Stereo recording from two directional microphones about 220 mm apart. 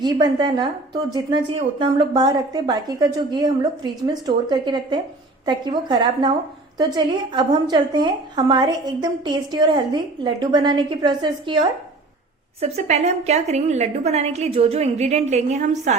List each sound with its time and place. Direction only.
0.0 s a woman's voice: 20° right (ahead or behind)
12.5 s a woman's voice: 30° right (ahead or behind)